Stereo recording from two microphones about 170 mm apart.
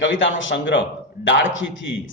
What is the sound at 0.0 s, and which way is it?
A man's voice, 90° left.